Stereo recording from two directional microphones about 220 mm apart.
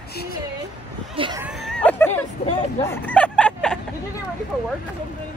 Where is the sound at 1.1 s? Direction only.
25° right (ahead or behind).